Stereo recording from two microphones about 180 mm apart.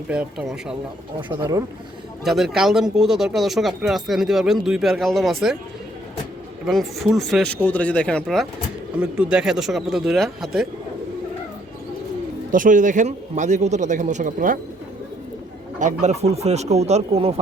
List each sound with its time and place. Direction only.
0.1 s speech: 5° right (ahead or behind)
1.3 s speech: 25° right (ahead or behind)
2.2 s speech: centre (ahead or behind)
6.7 s speech: centre (ahead or behind)
12.5 s a man's voice: 45° right (ahead or behind)
15.8 s speech: 45° right (ahead or behind)